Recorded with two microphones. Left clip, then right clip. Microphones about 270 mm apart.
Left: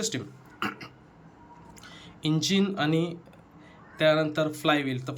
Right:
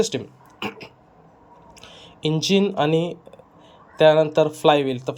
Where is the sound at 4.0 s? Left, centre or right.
Centre.